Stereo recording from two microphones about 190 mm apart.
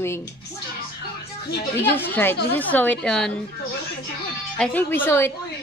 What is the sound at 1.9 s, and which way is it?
A woman's voice, 10° left (ahead or behind).